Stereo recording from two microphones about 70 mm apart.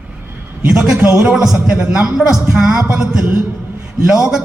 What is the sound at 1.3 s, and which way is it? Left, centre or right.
A man's voice, centre.